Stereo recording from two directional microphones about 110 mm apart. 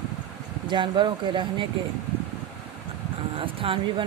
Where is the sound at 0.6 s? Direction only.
45° right (ahead or behind).